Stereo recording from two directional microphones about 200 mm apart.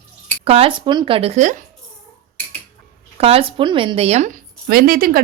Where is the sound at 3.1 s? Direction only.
30° right (ahead or behind); by 5.2 s 45° right (ahead or behind).